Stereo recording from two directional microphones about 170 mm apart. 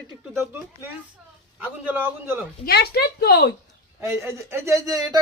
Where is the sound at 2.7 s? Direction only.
70° left (ahead or behind).